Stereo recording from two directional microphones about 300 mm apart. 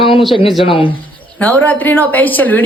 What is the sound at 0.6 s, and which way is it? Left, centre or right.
Speech, centre.